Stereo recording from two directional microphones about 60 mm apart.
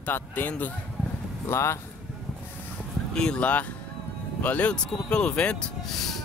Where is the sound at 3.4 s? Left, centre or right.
Left.